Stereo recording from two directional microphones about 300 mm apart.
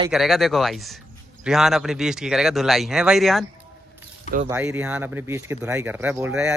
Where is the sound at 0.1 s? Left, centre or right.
Centre.